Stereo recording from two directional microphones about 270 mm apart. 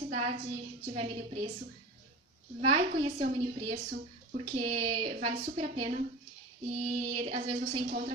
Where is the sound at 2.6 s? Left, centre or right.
Centre.